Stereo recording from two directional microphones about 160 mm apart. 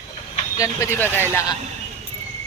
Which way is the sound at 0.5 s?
20° left (ahead or behind).